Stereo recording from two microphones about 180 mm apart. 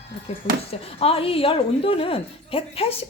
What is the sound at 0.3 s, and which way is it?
Speech, 35° left (ahead or behind).